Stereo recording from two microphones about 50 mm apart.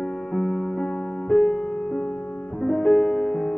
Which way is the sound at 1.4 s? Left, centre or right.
Centre.